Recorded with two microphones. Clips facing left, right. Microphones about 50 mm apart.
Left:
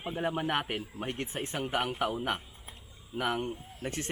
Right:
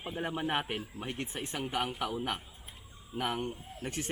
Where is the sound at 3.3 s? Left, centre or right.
Centre.